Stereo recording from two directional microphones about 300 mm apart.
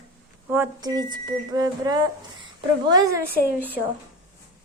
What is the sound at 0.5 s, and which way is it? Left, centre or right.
Speech, centre.